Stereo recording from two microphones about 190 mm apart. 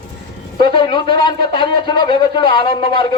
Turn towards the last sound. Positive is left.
turn(degrees=25)  # may be behind; listen again after turning